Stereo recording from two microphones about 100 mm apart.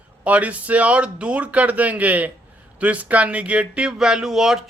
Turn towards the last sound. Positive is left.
turn(degrees=-5)  # may be behind; listen again after turning